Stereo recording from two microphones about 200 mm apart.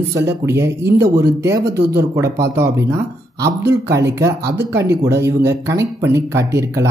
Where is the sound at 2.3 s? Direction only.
15° right (ahead or behind).